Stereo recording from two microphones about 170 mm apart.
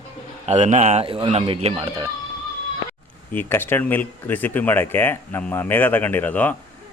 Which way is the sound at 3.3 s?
10° left (ahead or behind).